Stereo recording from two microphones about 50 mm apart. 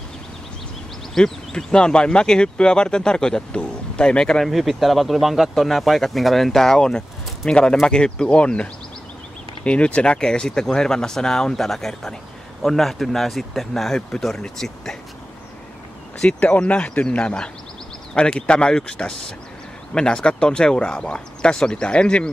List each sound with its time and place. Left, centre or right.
1.1 s speech: centre
4.5 s speech: centre; by 8.6 s left
9.7 s speech: left; by 15.0 s centre
16.3 s speech: left